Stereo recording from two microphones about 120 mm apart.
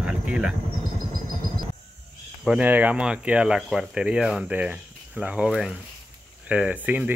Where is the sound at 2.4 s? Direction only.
15° right (ahead or behind).